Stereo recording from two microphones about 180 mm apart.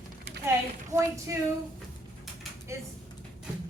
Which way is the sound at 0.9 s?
40° right (ahead or behind).